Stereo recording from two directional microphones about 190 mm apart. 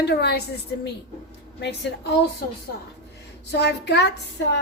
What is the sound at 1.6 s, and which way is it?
Speech, 60° left (ahead or behind).